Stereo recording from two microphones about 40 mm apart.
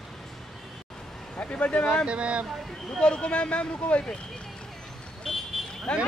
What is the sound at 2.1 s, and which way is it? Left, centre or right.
Speech, right.